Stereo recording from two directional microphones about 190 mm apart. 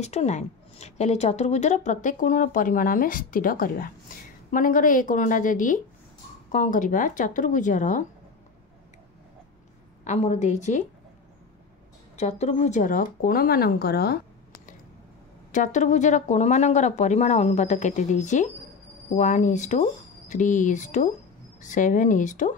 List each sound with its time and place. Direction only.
0.0 s a woman's voice: 35° left (ahead or behind)
10.0 s speech: 35° left (ahead or behind)
12.2 s a woman's voice: 35° left (ahead or behind); by 14.2 s 55° left (ahead or behind)
15.5 s speech: 40° left (ahead or behind)